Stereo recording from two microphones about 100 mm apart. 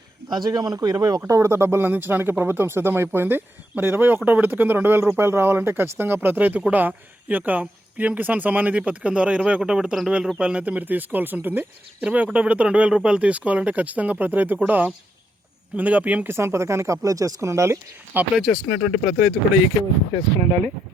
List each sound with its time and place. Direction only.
0.3 s a man's voice: 45° right (ahead or behind)
1.3 s speech: 30° right (ahead or behind)
18.3 s speech: 5° right (ahead or behind)